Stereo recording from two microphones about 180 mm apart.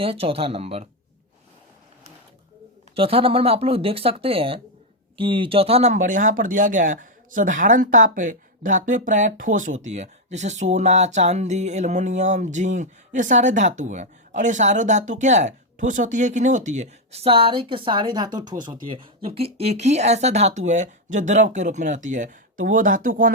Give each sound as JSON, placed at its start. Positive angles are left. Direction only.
{"t": 0.0, "sound": "speech", "side_deg": -30}
{"t": 2.9, "sound": "speech", "side_deg": -30}